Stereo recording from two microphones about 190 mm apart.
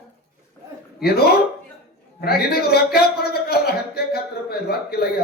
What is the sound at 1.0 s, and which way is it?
Speech, 55° left (ahead or behind).